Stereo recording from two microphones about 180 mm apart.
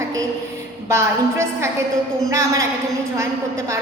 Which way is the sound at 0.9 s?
15° right (ahead or behind).